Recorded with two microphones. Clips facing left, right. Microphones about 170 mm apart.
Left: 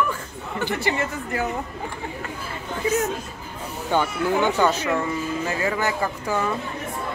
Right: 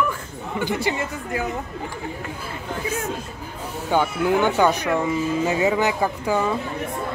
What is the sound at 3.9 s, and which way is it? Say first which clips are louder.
Speech: right 2 dB; 10° right (ahead or behind).